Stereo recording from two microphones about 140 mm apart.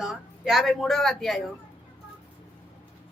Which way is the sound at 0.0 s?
Centre (ahead or behind).